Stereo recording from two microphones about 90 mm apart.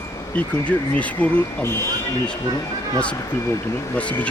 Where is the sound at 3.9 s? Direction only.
15° left (ahead or behind).